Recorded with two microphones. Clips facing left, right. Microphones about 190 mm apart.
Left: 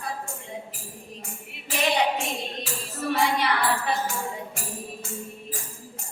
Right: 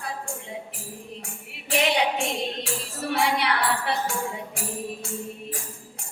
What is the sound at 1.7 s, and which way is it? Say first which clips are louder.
Tambourine: right 1 dB; 70° right (ahead or behind).